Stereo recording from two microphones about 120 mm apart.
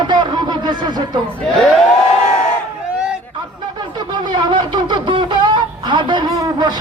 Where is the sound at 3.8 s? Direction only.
40° right (ahead or behind).